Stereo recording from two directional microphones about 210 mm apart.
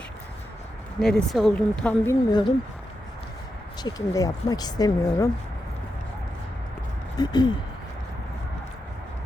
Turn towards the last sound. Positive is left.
turn(degrees=20)  # may be behind; listen again after turning